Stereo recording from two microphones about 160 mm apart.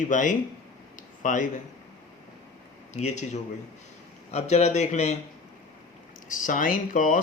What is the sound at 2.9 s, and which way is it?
Speech, 45° left (ahead or behind).